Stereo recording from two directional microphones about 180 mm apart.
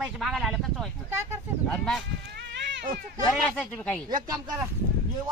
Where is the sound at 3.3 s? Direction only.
5° left (ahead or behind).